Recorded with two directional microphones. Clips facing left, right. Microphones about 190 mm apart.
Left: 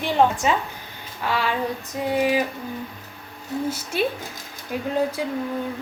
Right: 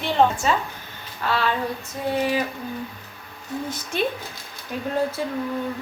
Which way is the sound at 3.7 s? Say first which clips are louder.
Left 1 dB; 10° left (ahead or behind).